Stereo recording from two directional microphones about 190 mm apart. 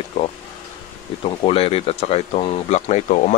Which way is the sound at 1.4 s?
30° left (ahead or behind).